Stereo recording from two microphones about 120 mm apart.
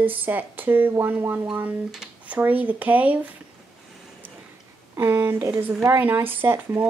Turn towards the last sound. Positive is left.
turn(degrees=-20)  # may be behind; listen again after turning